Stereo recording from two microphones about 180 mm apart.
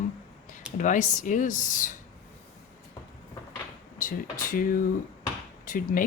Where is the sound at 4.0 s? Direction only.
50° left (ahead or behind).